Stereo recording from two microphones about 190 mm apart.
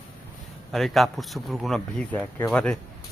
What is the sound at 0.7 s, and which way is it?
Speech, centre (ahead or behind).